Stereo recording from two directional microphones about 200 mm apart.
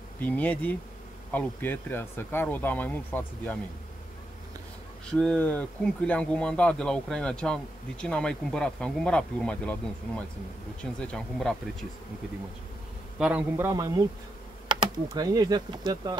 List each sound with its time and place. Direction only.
0.2 s speech: 10° left (ahead or behind)
5.0 s speech: 5° left (ahead or behind)
13.2 s a man's voice: 5° right (ahead or behind)